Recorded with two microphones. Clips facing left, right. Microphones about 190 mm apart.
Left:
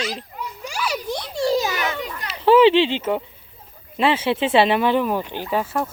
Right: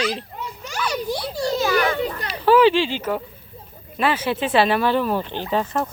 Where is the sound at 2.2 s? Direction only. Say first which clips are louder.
Left 2 dB; 25° left (ahead or behind).